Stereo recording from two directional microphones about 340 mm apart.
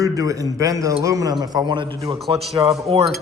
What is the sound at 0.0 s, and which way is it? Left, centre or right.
A man's voice, centre.